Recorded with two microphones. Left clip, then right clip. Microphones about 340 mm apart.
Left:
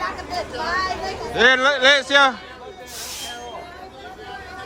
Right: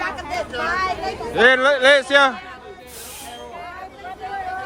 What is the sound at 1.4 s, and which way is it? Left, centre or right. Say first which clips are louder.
A man's voice: right 1 dB; centre.